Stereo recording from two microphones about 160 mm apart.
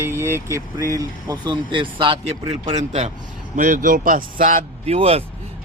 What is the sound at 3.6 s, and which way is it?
Speech, 55° right (ahead or behind).